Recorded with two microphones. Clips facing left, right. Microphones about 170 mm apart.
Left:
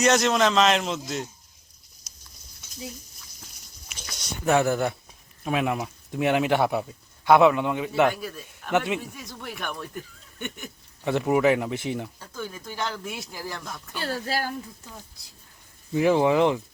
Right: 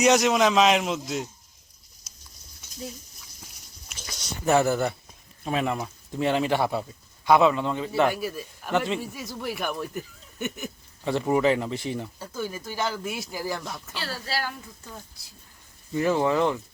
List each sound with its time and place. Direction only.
0.0 s a man's voice: 10° right (ahead or behind)
3.9 s speech: 5° right (ahead or behind); by 8.0 s 10° left (ahead or behind)
8.0 s a man's voice: 10° right (ahead or behind)
11.0 s speech: 5° left (ahead or behind)
12.2 s speech: 10° right (ahead or behind)
13.9 s speech: 50° left (ahead or behind)
16.0 s speech: 10° left (ahead or behind)